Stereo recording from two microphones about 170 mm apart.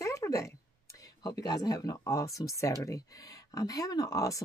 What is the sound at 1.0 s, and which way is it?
Speech, 20° left (ahead or behind).